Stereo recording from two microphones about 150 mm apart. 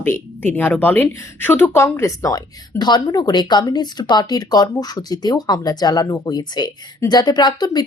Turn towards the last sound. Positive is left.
turn(degrees=30)  # may be behind; listen again after turning